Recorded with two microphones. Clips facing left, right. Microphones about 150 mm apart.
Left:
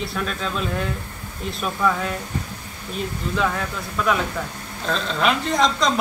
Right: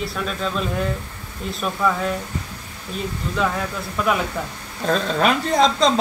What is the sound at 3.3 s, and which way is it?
Speech, centre (ahead or behind).